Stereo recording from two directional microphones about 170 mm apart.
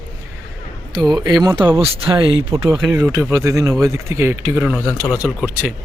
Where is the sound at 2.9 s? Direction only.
15° right (ahead or behind).